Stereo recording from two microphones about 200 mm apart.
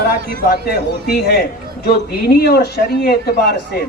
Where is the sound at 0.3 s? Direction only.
50° left (ahead or behind).